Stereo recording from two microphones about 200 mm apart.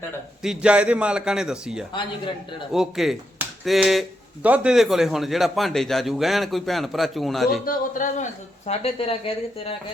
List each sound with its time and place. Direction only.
0.4 s a man's voice: 5° right (ahead or behind)
7.6 s speech: 45° left (ahead or behind)